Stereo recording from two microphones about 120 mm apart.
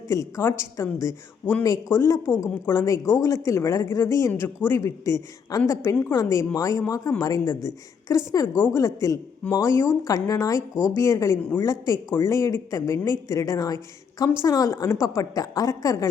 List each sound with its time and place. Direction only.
0.1 s speech: 25° left (ahead or behind)